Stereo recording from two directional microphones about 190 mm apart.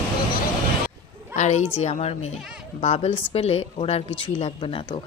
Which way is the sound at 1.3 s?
35° left (ahead or behind).